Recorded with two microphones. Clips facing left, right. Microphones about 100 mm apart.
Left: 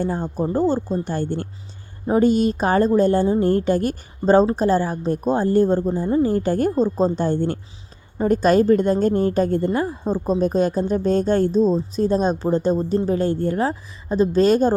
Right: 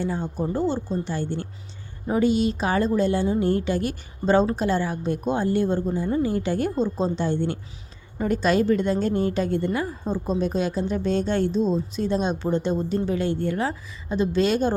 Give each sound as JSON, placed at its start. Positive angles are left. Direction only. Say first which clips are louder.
{"t": 0.0, "sound": "a woman's voice", "louder": "left 4 dB", "side_deg": 45}